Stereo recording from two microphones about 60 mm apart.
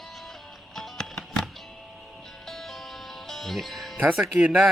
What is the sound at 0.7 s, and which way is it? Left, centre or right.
Music, centre.